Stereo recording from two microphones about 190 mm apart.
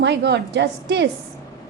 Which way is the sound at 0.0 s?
65° right (ahead or behind).